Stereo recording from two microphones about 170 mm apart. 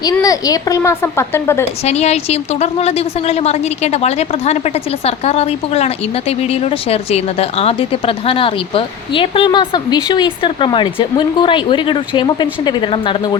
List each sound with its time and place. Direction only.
0.0 s a woman's voice: 20° left (ahead or behind)
1.8 s a woman's voice: 40° left (ahead or behind)